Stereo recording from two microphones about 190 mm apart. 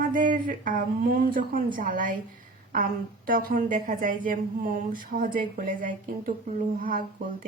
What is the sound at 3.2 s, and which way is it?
A woman's voice, 45° right (ahead or behind).